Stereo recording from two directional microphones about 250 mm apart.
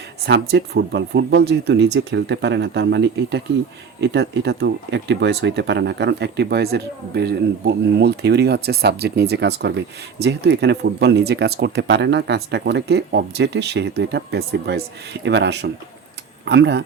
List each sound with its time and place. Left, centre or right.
0.3 s speech: right